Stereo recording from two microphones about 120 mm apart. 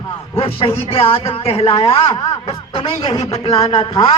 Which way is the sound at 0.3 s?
55° left (ahead or behind).